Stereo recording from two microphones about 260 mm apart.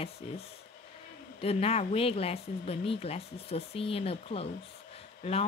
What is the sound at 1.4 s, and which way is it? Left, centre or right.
Speech, left.